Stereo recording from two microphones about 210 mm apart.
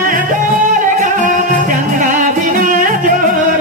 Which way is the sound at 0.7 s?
40° right (ahead or behind).